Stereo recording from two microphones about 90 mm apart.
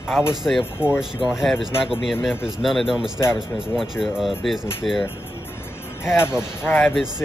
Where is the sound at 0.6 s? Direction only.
25° left (ahead or behind).